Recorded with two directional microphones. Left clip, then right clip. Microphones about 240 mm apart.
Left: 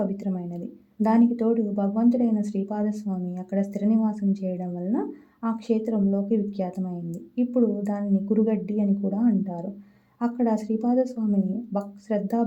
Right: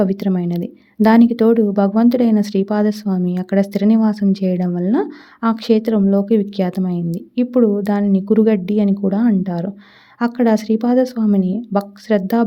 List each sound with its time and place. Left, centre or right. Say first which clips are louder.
0.0 s speech: right 11 dB; right